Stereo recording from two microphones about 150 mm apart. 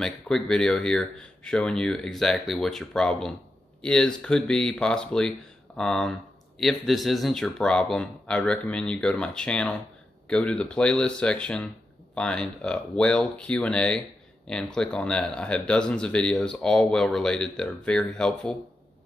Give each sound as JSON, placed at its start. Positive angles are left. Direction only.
{"t": 0.0, "sound": "speech", "side_deg": 5}